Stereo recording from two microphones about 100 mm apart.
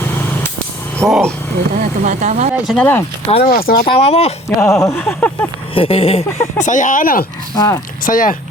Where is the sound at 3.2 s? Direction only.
70° left (ahead or behind); by 4.4 s 85° left.